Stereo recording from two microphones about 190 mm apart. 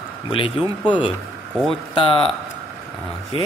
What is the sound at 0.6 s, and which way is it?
Speech, 5° right (ahead or behind).